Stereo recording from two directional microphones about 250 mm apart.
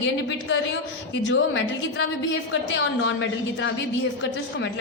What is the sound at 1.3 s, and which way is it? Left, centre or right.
A woman's voice, left.